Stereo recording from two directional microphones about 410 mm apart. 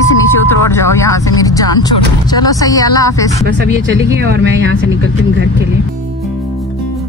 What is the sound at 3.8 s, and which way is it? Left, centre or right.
Speech, right.